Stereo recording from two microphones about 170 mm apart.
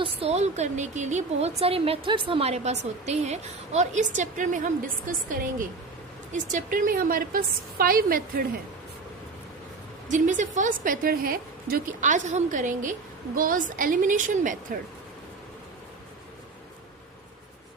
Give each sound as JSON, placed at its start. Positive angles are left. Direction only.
{"t": 0.0, "sound": "a woman's voice", "side_deg": -35}
{"t": 10.1, "sound": "a woman's voice", "side_deg": -50}